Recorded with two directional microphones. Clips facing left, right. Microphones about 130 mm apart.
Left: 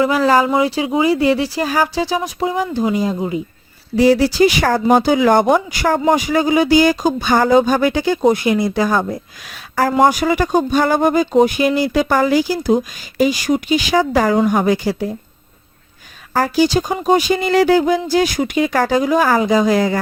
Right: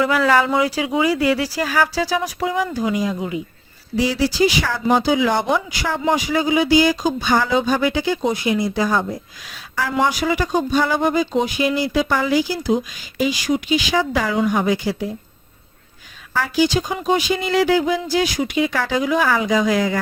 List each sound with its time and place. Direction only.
0.0 s speech: 30° left (ahead or behind)
3.9 s speech: 50° left (ahead or behind)
16.3 s speech: 40° left (ahead or behind)